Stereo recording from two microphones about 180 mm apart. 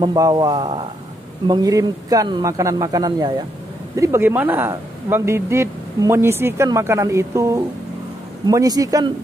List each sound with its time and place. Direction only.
0.0 s a man's voice: 20° right (ahead or behind)